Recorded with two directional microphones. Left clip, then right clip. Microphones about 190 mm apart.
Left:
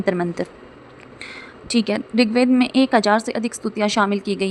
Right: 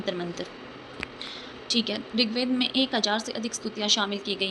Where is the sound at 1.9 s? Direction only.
50° left (ahead or behind).